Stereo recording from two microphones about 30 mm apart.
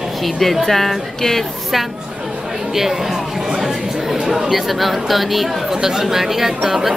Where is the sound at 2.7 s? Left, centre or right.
Centre.